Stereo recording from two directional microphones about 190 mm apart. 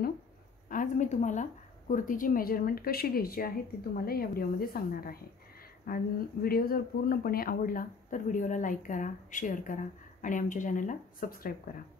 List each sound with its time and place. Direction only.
0.7 s speech: 40° left (ahead or behind)